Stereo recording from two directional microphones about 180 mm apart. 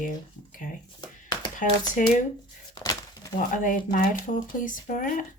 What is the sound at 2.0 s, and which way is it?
Speech, 45° left (ahead or behind).